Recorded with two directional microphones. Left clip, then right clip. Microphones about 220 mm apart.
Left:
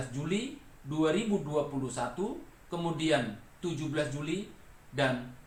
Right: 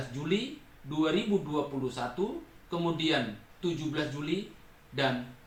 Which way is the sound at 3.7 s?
Centre (ahead or behind).